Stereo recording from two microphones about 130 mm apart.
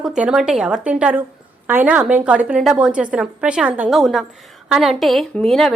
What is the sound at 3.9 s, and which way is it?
A woman's voice, centre (ahead or behind).